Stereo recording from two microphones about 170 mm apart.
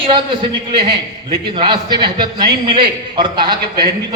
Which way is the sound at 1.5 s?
30° right (ahead or behind).